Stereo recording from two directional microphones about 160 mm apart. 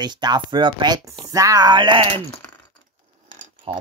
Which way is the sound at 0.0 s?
25° right (ahead or behind).